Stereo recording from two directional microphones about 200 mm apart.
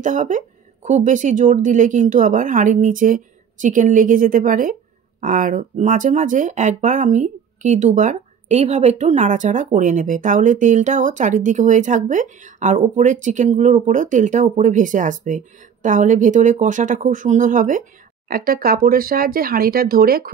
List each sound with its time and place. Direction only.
0.0 s speech: 40° right (ahead or behind)